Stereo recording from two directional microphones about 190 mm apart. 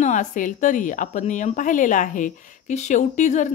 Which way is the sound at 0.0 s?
40° left (ahead or behind).